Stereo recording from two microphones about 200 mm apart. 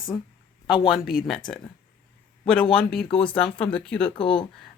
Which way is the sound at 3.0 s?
25° left (ahead or behind).